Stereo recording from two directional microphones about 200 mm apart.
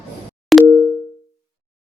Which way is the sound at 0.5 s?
Centre (ahead or behind).